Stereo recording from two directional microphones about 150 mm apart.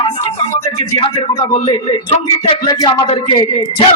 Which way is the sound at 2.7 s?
25° left (ahead or behind).